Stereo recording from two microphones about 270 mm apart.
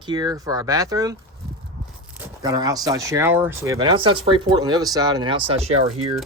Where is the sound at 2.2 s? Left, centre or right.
Centre.